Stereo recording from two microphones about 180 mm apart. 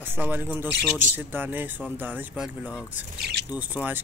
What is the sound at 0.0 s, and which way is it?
Speech, 10° right (ahead or behind).